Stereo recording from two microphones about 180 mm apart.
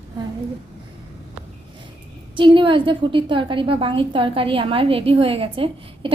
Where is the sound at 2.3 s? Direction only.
30° right (ahead or behind).